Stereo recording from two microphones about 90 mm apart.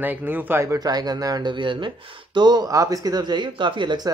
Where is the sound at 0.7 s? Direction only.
45° right (ahead or behind); by 1.9 s 65° right (ahead or behind).